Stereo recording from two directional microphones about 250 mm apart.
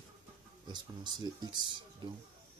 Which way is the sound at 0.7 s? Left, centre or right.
Centre.